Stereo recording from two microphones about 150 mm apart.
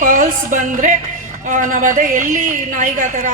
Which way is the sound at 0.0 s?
60° right (ahead or behind).